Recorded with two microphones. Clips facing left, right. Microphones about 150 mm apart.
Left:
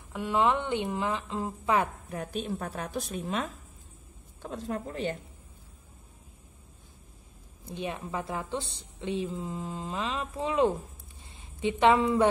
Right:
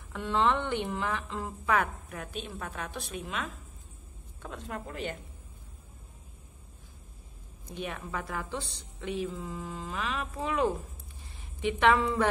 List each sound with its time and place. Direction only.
0.1 s speech: 15° left (ahead or behind); by 5.2 s 35° left (ahead or behind)
7.6 s speech: 25° left (ahead or behind)